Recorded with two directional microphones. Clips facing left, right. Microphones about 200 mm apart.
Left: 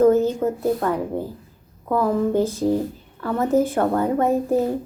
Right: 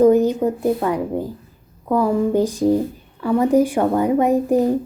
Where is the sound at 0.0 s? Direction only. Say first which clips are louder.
Right 3 dB; 15° right (ahead or behind).